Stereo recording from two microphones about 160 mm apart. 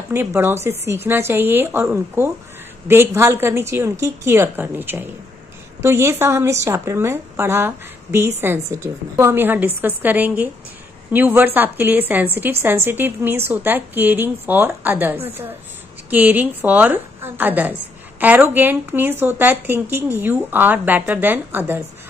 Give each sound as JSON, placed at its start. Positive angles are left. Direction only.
{"t": 0.1, "sound": "speech", "side_deg": -15}